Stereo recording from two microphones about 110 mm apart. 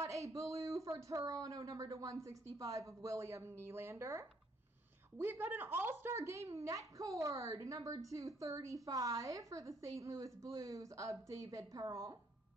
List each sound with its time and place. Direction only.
0.0 s speech: 30° right (ahead or behind)